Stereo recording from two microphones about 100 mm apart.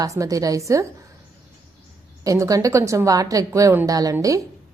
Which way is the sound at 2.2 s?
35° right (ahead or behind).